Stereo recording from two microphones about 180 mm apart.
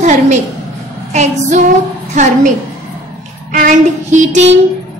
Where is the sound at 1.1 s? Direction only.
40° right (ahead or behind).